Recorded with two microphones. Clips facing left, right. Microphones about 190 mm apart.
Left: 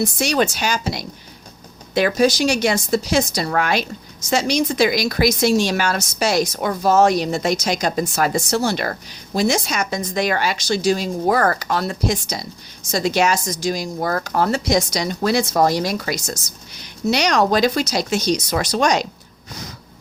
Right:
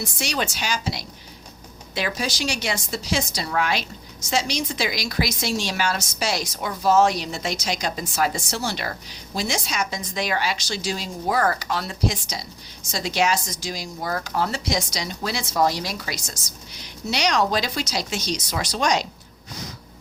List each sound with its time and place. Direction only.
0.0 s a woman's voice: 45° left (ahead or behind)